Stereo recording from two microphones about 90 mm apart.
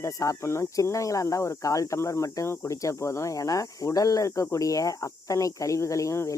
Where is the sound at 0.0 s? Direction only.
35° left (ahead or behind).